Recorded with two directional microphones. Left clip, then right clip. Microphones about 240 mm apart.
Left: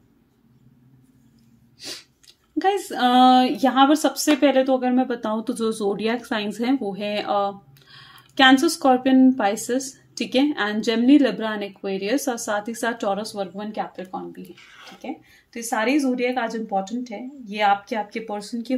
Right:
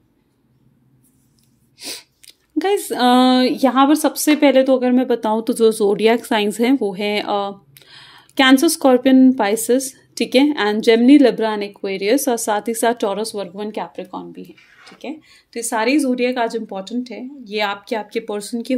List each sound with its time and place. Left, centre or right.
1.8 s sneeze: right
2.6 s a woman's voice: right